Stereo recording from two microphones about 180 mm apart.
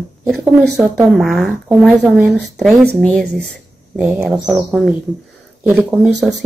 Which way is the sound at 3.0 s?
5° left (ahead or behind).